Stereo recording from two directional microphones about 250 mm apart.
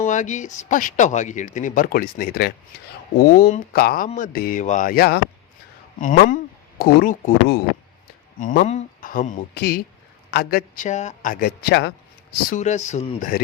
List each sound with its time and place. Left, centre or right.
0.0 s a man's voice: left